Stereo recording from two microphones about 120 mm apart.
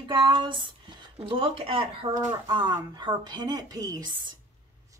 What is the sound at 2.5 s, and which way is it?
A woman's voice, 40° right (ahead or behind).